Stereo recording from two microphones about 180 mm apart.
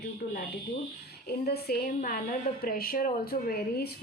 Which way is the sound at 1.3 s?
60° left (ahead or behind).